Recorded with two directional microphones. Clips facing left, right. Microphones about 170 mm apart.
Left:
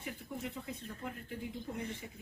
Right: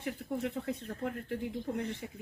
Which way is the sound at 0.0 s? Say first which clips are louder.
Right 7 dB; 70° right (ahead or behind).